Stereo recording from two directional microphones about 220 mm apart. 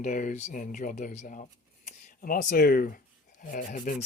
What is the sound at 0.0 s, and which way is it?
Speech, 35° left (ahead or behind).